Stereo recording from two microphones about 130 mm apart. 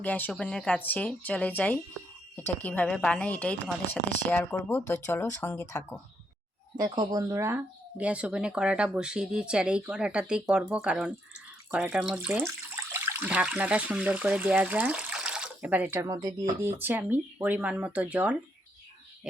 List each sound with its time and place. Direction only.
0.0 s speech: 10° left (ahead or behind)
6.7 s speech: 35° right (ahead or behind); by 12.5 s 10° right (ahead or behind)
12.5 s speech: 20° right (ahead or behind)